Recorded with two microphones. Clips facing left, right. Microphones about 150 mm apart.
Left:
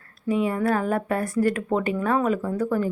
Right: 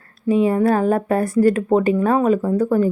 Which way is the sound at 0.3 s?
30° right (ahead or behind).